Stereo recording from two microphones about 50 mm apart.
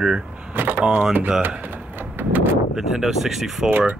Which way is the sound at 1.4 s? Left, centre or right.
Right.